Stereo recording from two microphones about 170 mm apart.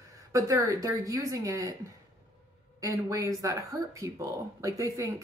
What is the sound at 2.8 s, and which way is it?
A woman's voice, 20° right (ahead or behind).